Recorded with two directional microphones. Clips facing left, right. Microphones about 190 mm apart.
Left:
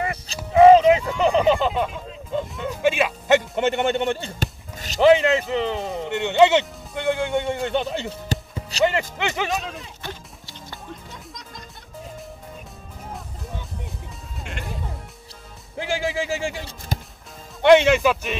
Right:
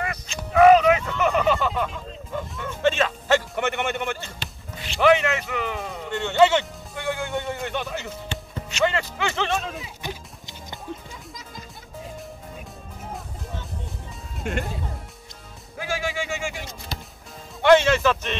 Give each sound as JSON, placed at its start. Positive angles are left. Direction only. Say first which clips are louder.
{"t": 0.0, "sound": "a sound", "louder": "left 3 dB", "side_deg": 25}
{"t": 4.4, "sound": "music", "louder": "left 6 dB", "side_deg": 40}
{"t": 5.0, "sound": "music", "louder": "left 4 dB", "side_deg": 20}
{"t": 8.8, "sound": "music", "louder": "left 2 dB", "side_deg": 20}
{"t": 9.6, "sound": "a sound", "louder": "right 1 dB", "side_deg": 0}
{"t": 10.0, "sound": "music", "louder": "right 1 dB", "side_deg": -20}
{"t": 14.4, "sound": "music", "louder": "right 8 dB", "side_deg": -50}
{"t": 15.8, "sound": "a sound", "louder": "left 3 dB", "side_deg": 30}
{"t": 17.6, "sound": "a man's voice", "louder": "left 2 dB", "side_deg": 15}